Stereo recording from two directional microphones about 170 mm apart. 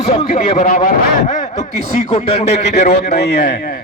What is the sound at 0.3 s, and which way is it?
Speech, 40° left (ahead or behind).